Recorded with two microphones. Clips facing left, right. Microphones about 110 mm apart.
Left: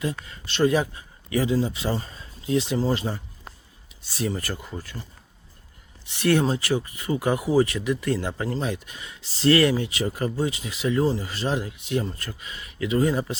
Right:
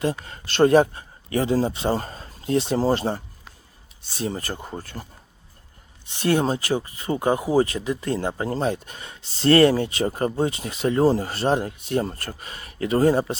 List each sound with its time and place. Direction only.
0.0 s a man's voice: 35° right (ahead or behind)
2.0 s speech: 50° right (ahead or behind)
6.1 s speech: 30° right (ahead or behind)